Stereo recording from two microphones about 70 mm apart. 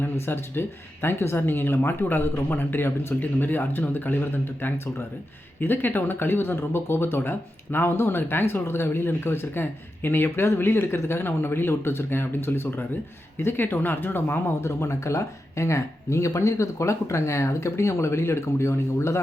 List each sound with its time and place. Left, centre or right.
0.0 s speech: left